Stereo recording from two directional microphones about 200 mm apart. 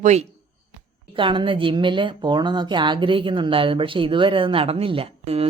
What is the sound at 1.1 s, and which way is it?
A woman's voice, 25° right (ahead or behind).